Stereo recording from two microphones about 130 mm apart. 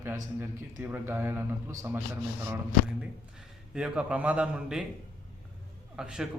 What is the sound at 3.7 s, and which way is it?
A man's voice, 5° right (ahead or behind).